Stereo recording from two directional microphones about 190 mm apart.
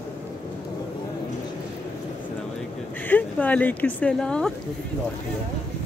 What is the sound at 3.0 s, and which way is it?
Speech, 10° left (ahead or behind).